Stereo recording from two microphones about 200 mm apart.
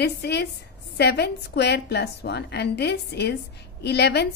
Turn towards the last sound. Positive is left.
turn(degrees=55)  # may be behind; listen again after turning